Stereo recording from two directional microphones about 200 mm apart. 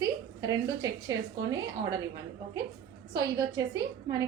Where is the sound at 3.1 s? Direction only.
20° right (ahead or behind).